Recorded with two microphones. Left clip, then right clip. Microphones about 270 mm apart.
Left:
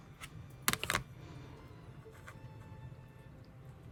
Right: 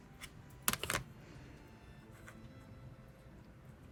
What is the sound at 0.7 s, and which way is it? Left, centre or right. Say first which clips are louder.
Computer keyboard: left 3 dB; centre.